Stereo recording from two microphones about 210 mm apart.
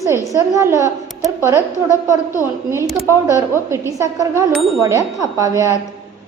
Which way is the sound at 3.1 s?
15° right (ahead or behind).